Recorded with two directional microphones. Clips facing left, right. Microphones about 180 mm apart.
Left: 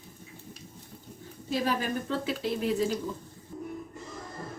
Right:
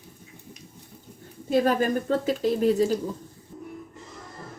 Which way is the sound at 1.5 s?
45° right (ahead or behind).